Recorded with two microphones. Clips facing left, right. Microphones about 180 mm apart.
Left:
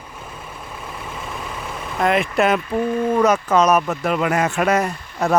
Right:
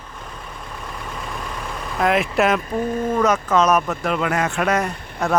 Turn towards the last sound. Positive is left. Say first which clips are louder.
# left 2 dB
turn(degrees=10)  # may be behind; listen again after turning